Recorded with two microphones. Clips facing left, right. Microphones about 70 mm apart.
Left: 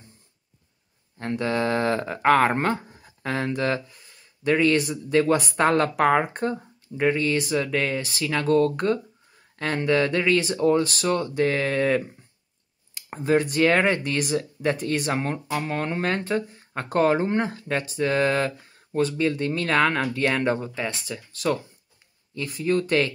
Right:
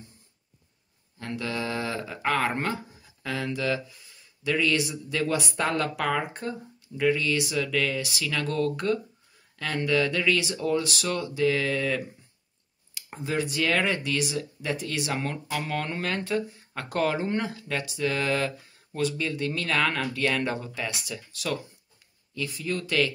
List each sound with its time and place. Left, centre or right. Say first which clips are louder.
1.1 s speech: left 6 dB; left